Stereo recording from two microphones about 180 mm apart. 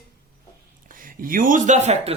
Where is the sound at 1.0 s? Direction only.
50° right (ahead or behind).